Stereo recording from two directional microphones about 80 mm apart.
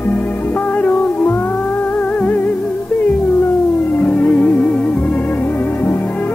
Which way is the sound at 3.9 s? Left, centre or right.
Centre.